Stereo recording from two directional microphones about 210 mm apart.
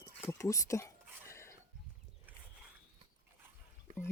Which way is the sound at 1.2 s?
15° left (ahead or behind).